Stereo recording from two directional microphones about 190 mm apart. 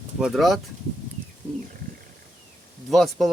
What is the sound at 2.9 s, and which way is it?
Speech, centre (ahead or behind).